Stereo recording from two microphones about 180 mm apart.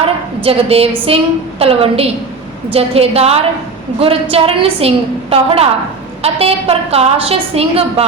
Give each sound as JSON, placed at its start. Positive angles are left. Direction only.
{"t": 0.4, "sound": "a woman's voice", "side_deg": -35}